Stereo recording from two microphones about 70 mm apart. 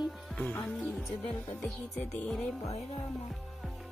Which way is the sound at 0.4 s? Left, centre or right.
Left.